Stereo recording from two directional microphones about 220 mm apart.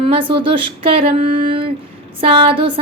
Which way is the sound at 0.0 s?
25° right (ahead or behind).